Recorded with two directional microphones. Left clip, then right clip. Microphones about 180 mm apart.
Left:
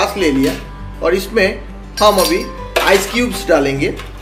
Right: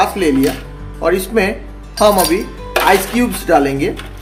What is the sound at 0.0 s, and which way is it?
Speech, 50° right (ahead or behind).